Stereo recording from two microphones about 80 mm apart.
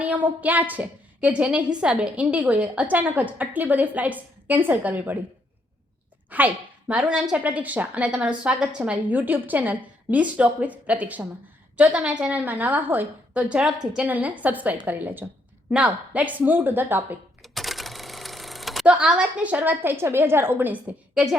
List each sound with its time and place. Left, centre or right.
0.0 s a woman's voice: right
6.3 s a woman's voice: centre
7.4 s a woman's voice: centre
17.4 s a sound: centre
18.9 s a woman's voice: centre